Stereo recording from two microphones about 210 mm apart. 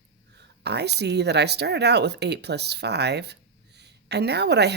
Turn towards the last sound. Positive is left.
turn(degrees=-50)  # may be behind; listen again after turning